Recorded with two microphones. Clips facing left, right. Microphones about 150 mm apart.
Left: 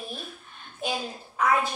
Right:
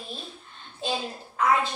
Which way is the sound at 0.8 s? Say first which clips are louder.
Right 1 dB; 10° left (ahead or behind).